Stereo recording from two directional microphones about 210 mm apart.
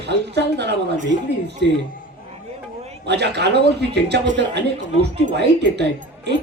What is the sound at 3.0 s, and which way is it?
Speech, 55° right (ahead or behind).